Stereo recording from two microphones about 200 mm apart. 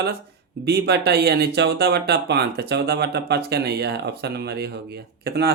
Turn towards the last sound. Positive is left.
turn(degrees=-50)  # may be behind; listen again after turning